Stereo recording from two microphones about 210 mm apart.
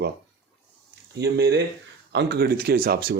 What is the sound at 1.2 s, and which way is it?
Speech, 50° right (ahead or behind).